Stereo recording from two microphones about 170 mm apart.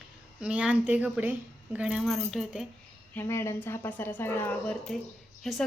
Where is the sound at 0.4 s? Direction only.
5° right (ahead or behind).